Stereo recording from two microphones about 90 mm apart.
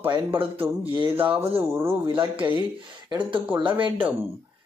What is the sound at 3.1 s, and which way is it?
Speech, 60° right (ahead or behind).